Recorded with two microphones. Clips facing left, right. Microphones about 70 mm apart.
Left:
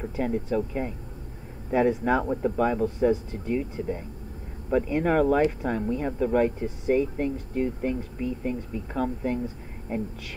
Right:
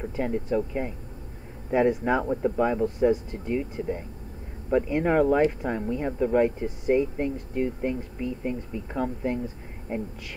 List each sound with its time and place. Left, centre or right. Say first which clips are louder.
0.5 s speech: right 1 dB; centre